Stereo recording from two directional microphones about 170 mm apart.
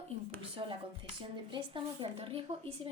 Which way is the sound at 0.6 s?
30° right (ahead or behind).